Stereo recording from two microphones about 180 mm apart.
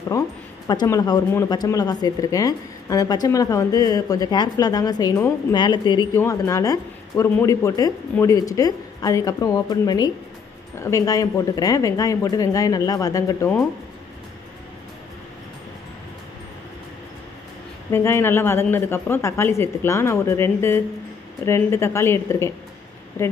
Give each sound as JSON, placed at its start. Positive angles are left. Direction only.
{"t": 0.1, "sound": "speech", "side_deg": 20}
{"t": 17.9, "sound": "speech", "side_deg": 15}